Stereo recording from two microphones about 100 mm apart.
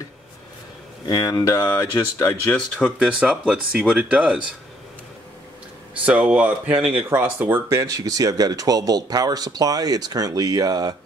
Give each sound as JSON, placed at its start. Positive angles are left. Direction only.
{"t": 1.0, "sound": "speech", "side_deg": 40}
{"t": 2.8, "sound": "speech", "side_deg": -10}
{"t": 6.0, "sound": "speech", "side_deg": -15}